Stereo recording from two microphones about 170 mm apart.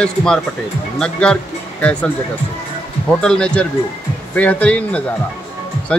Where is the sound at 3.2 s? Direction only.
5° left (ahead or behind).